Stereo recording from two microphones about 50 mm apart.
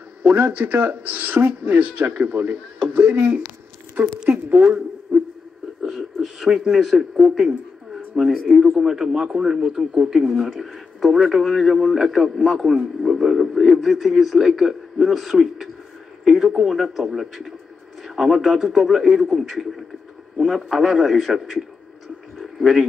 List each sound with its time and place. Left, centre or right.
0.3 s speech: right
2.0 s a woman's voice: right
2.3 s speech: right
4.3 s a woman's voice: right
5.1 s a sound: right
5.8 s a sound: centre
8.7 s a man's voice: centre
12.7 s a man's voice: centre
22.4 s a sound: centre